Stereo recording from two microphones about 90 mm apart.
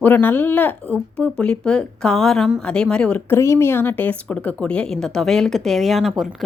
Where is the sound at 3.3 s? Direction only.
30° left (ahead or behind).